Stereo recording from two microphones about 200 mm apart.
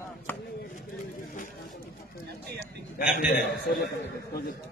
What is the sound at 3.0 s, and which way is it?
A man's voice, 50° left (ahead or behind).